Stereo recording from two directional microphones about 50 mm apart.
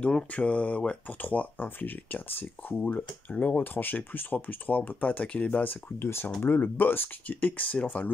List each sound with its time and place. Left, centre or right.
0.3 s speech: left
3.7 s speech: left
6.0 s speech: left
6.4 s speech: left
7.3 s speech: left